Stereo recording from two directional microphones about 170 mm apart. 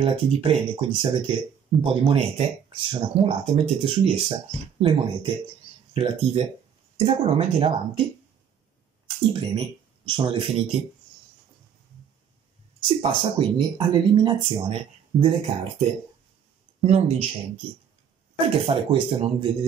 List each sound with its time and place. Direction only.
0.0 s speech: 35° right (ahead or behind)
9.3 s speech: 30° right (ahead or behind)
12.8 s speech: 30° right (ahead or behind)
18.7 s speech: 30° right (ahead or behind)